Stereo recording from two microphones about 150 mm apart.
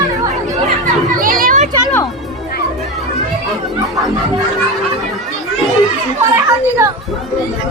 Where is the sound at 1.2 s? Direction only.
70° right (ahead or behind).